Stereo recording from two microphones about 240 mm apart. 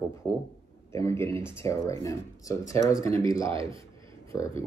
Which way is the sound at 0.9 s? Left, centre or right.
Centre.